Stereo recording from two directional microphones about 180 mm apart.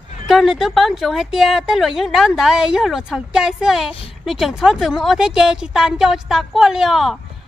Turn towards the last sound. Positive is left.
turn(degrees=0)  # may be behind; listen again after turning